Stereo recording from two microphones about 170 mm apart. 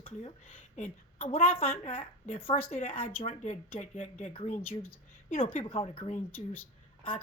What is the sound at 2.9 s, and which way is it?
Speech, 10° left (ahead or behind).